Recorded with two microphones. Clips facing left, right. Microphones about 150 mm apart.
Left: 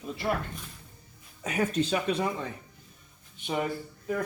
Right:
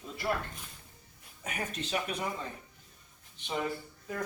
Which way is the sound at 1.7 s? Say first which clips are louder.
Left 8 dB; 35° left (ahead or behind).